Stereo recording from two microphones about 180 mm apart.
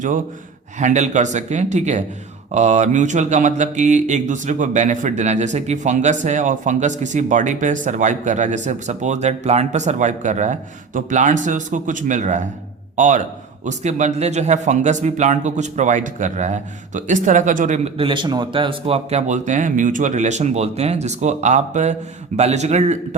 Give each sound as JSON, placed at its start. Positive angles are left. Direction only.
{"t": 0.8, "sound": "speech", "side_deg": -40}